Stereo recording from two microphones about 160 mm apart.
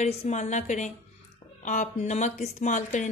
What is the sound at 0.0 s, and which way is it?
A woman's voice, 45° left (ahead or behind).